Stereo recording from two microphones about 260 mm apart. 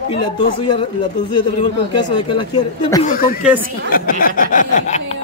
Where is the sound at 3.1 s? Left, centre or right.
Left.